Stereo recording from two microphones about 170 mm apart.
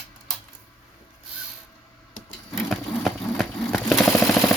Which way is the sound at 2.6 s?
Centre (ahead or behind).